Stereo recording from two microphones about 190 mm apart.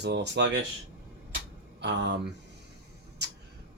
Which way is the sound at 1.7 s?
65° right (ahead or behind).